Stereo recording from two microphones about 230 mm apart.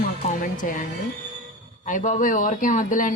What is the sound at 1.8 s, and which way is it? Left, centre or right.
Speech, left.